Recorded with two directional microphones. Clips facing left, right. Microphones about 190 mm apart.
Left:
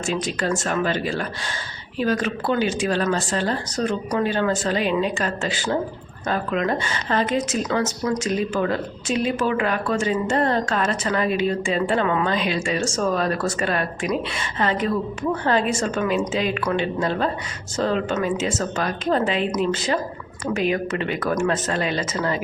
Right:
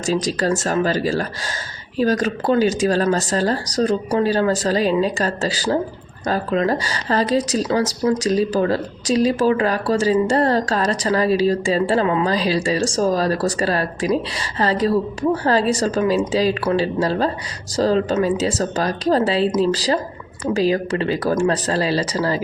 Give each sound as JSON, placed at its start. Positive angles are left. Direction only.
{"t": 0.0, "sound": "a woman's voice", "side_deg": -40}